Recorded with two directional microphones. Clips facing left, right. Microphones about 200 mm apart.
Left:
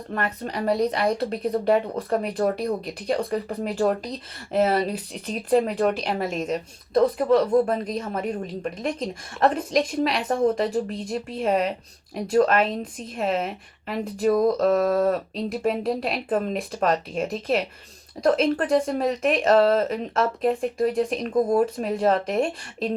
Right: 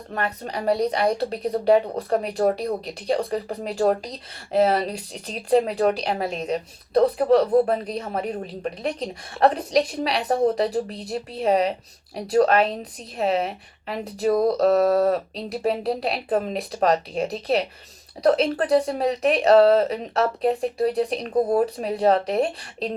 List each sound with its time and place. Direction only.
0.2 s speech: 35° right (ahead or behind)